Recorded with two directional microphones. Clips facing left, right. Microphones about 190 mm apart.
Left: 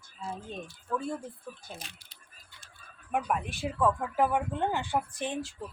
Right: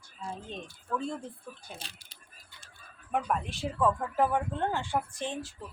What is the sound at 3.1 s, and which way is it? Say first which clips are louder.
Speech: even; 10° left (ahead or behind).